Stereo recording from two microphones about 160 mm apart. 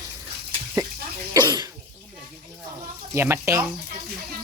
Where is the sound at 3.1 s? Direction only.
15° right (ahead or behind).